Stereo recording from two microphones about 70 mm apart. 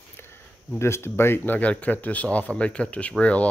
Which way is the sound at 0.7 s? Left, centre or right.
Left.